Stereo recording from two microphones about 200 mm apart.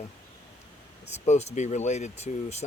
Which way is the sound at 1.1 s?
35° left (ahead or behind).